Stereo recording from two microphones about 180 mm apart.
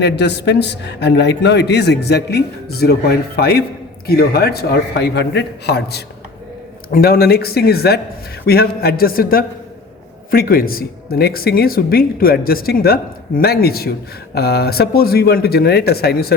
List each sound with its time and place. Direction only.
0.0 s a man's voice: 70° left (ahead or behind)